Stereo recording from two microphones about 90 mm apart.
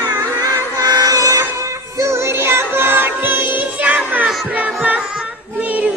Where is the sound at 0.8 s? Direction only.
45° right (ahead or behind).